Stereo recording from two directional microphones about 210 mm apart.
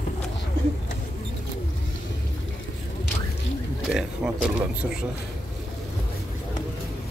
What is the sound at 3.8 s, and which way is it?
Speech, centre (ahead or behind).